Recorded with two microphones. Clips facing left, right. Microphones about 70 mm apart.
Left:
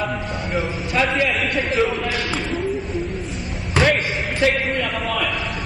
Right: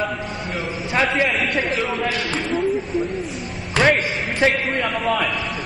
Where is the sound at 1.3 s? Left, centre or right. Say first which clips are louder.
Even; centre.